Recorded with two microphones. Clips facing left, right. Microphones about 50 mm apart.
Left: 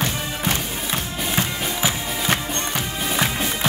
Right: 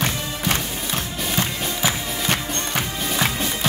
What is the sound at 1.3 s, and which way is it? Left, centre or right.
Music, centre.